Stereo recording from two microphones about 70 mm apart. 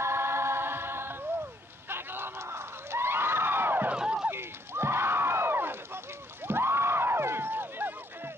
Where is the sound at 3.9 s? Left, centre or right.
Centre.